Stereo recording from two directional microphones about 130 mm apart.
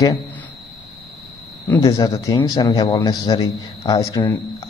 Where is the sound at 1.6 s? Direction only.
25° left (ahead or behind).